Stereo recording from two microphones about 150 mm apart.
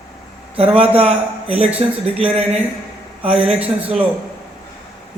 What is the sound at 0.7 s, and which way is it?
A man's voice, 40° right (ahead or behind).